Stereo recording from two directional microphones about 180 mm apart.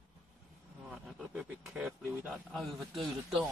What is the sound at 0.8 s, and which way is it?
Speech, centre (ahead or behind).